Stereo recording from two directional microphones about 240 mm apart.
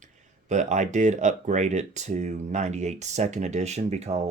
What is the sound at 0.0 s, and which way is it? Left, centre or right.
Speech, right.